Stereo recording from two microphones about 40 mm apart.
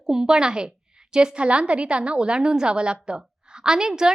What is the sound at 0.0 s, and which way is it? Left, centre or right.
A woman's voice, centre.